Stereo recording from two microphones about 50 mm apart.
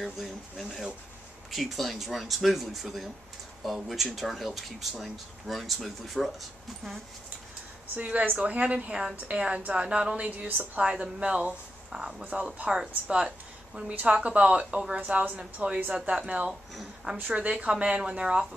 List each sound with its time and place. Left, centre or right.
0.0 s speech: centre
8.0 s a woman's voice: right
13.8 s a woman's voice: right